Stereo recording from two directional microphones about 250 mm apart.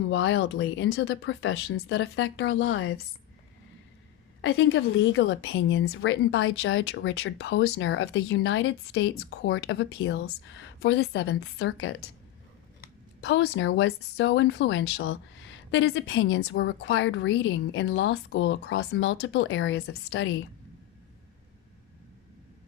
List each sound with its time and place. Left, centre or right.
0.1 s a woman's voice: left
4.4 s a woman's voice: left
13.2 s a woman's voice: left